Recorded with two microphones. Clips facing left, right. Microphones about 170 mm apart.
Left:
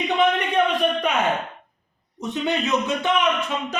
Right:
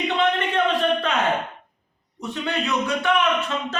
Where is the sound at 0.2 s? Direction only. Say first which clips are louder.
Left 2 dB; 15° left (ahead or behind).